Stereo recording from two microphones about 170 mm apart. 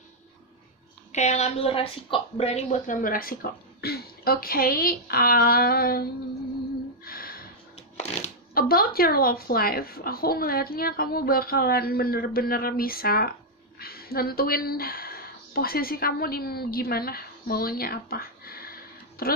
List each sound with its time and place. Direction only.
1.1 s a woman's voice: 40° left (ahead or behind); by 6.0 s 65° left (ahead or behind)
7.1 s a sound: 60° left (ahead or behind)
7.7 s shuffling cards: 40° left (ahead or behind)
8.5 s a woman's voice: 60° left (ahead or behind)